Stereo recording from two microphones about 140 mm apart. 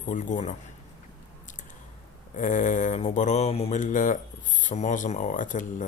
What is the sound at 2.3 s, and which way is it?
Speech, 65° left (ahead or behind).